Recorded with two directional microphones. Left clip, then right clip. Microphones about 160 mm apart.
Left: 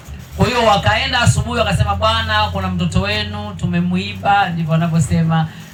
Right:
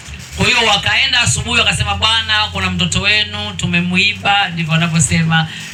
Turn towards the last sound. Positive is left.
turn(degrees=45)  # may be behind; listen again after turning